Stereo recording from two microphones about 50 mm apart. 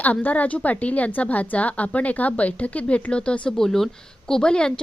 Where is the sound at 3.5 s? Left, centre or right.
Centre.